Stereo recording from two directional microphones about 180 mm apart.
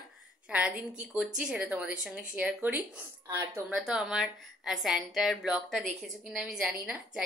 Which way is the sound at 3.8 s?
5° right (ahead or behind).